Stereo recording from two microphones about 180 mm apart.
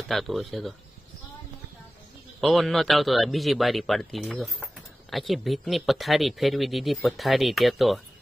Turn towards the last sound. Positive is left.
turn(degrees=0)  # may be behind; listen again after turning